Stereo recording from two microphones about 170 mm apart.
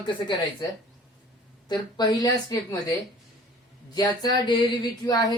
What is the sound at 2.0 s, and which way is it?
Speech, 25° left (ahead or behind).